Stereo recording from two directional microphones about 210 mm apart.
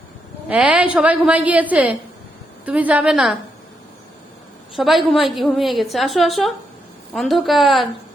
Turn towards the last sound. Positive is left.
turn(degrees=0)  # may be behind; listen again after turning